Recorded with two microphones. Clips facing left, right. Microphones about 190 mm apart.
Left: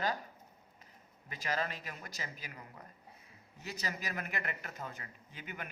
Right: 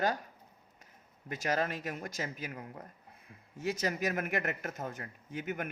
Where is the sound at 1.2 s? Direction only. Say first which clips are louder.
Right 5 dB; 50° right (ahead or behind).